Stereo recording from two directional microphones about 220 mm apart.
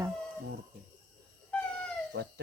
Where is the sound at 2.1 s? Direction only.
45° right (ahead or behind).